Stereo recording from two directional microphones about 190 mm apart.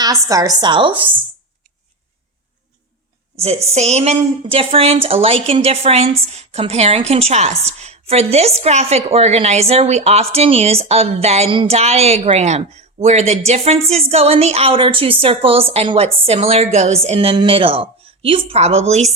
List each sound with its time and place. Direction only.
0.0 s a woman's voice: 15° right (ahead or behind)
3.7 s a woman's voice: 35° right (ahead or behind)